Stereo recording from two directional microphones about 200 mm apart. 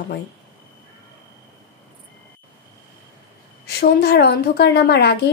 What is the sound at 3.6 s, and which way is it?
Speech, 50° left (ahead or behind).